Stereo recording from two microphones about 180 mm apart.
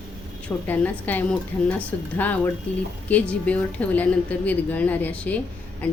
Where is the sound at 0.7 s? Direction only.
10° left (ahead or behind).